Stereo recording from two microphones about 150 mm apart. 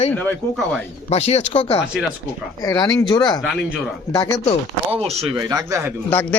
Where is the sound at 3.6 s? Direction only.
5° right (ahead or behind).